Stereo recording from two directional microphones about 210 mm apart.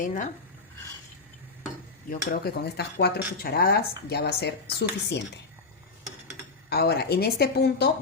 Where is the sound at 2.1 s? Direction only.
45° left (ahead or behind).